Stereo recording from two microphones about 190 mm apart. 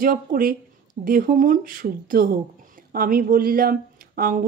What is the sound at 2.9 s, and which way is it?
A woman's voice, 50° right (ahead or behind).